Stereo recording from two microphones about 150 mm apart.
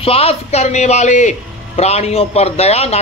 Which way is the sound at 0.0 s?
40° left (ahead or behind).